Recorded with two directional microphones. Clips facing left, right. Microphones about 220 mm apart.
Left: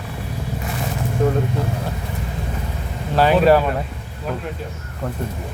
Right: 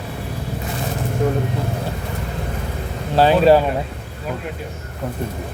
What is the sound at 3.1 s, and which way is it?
Speech, 30° right (ahead or behind).